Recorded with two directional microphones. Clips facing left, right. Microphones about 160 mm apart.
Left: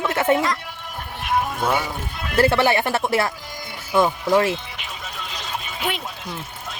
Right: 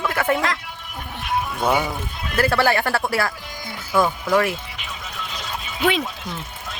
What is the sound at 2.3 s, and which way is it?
Speech, 25° left (ahead or behind).